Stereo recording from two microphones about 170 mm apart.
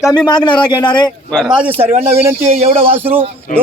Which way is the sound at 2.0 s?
40° right (ahead or behind).